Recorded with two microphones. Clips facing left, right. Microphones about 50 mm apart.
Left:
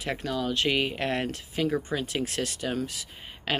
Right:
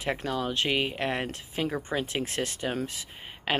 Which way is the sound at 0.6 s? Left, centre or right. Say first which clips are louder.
Left 2 dB; centre.